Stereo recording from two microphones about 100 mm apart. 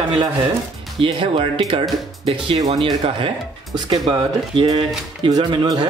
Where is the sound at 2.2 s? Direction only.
80° right; by 3.3 s 65° right (ahead or behind).